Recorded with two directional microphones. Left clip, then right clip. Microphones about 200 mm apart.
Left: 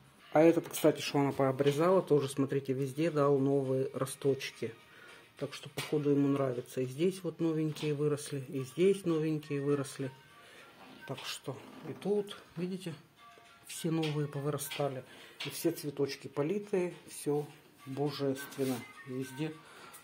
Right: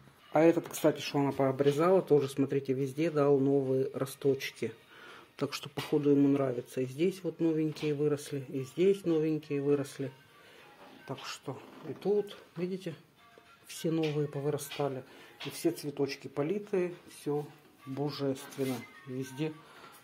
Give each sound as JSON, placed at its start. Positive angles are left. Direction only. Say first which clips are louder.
{"t": 0.3, "sound": "speech", "louder": "even", "side_deg": 0}
{"t": 5.4, "sound": "speech", "louder": "right 5 dB", "side_deg": -25}
{"t": 5.9, "sound": "speech", "louder": "right 3 dB", "side_deg": -10}
{"t": 11.1, "sound": "speech", "louder": "even", "side_deg": 0}